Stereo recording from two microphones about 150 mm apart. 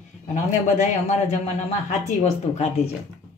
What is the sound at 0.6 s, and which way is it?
Speech, 55° left (ahead or behind).